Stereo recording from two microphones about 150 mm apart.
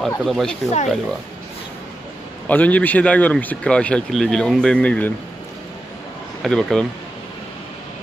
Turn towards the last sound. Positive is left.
turn(degrees=5)  # may be behind; listen again after turning